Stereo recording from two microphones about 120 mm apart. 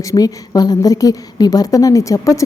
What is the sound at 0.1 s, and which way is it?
A woman's voice, 30° left (ahead or behind).